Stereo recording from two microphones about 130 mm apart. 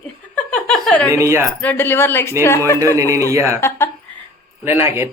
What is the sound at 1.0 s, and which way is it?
Speech, 20° right (ahead or behind).